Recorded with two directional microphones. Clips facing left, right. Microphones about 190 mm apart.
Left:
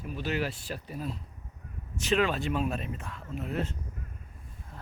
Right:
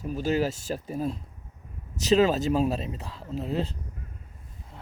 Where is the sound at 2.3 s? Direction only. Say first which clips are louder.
Right 6 dB; 35° right (ahead or behind).